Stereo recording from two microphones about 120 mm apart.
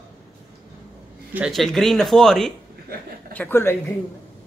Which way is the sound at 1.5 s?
Centre (ahead or behind).